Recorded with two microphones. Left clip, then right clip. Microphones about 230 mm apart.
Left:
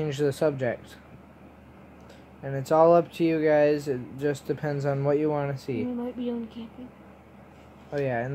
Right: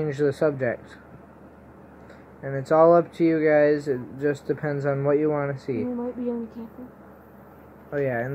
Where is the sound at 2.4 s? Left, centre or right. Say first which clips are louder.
Right 2 dB; centre.